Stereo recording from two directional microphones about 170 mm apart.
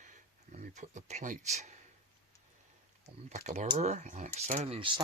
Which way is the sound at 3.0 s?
45° right (ahead or behind).